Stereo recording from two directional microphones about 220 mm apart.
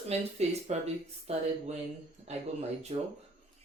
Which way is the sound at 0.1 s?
30° right (ahead or behind).